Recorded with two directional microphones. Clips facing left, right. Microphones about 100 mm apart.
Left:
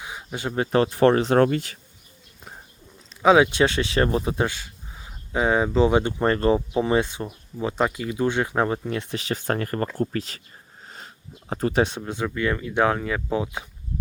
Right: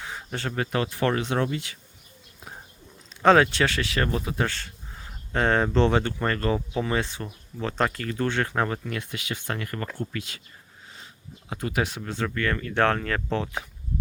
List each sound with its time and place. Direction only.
0.0 s a sound: 10° left (ahead or behind)
0.5 s speech: 30° left (ahead or behind)
1.4 s speech: 55° left (ahead or behind)
3.2 s speech: 10° left (ahead or behind); by 4.4 s 25° left (ahead or behind)
4.4 s speech: 10° left (ahead or behind)